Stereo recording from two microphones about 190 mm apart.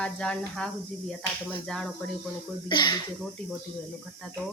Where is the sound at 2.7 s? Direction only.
25° left (ahead or behind).